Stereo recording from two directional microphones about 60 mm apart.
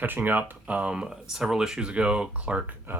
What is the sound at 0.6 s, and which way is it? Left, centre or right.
Speech, right.